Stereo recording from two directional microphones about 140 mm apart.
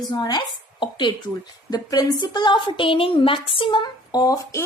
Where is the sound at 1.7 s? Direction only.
30° left (ahead or behind).